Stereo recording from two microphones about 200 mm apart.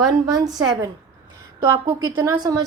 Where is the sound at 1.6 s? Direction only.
15° right (ahead or behind).